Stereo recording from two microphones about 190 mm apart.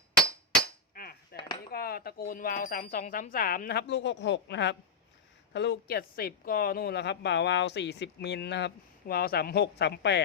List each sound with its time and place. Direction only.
0.9 s cutlery: 55° left (ahead or behind)
1.7 s a woman's voice: 55° left (ahead or behind)